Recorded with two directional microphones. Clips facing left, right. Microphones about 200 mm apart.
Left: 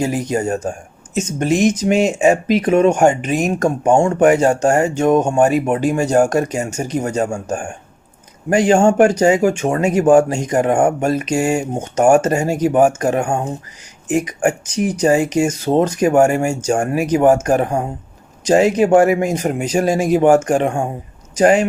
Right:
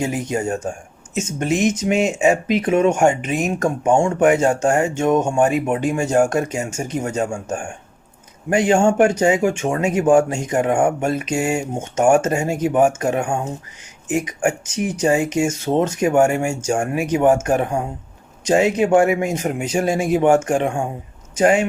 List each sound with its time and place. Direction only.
0.0 s speech: 40° left (ahead or behind)
1.5 s speech: 5° right (ahead or behind)
1.8 s speech: 35° left (ahead or behind)